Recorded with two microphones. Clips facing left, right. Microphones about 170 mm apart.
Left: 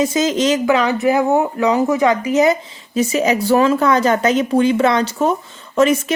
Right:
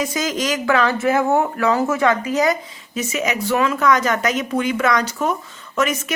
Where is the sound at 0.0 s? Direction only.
25° left (ahead or behind).